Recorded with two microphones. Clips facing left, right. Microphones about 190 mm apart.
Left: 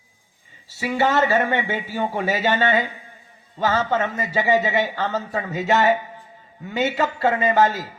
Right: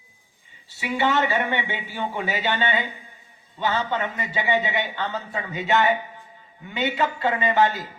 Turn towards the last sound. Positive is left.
turn(degrees=40)  # may be behind; listen again after turning